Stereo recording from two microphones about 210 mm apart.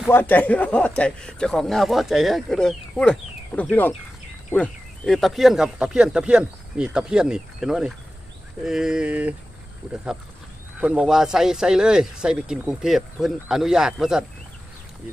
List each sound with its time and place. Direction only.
0.1 s a man's voice: 10° left (ahead or behind)